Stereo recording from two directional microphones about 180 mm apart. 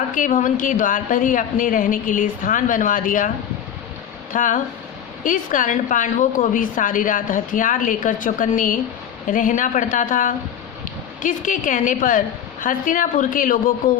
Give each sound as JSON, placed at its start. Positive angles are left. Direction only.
{"t": 0.1, "sound": "a woman's voice", "side_deg": 45}